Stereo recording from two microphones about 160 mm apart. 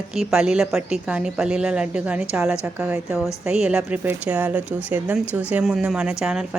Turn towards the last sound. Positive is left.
turn(degrees=-5)  # may be behind; listen again after turning